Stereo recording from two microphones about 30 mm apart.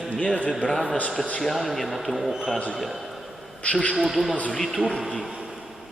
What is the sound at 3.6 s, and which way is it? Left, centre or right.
Speech, left.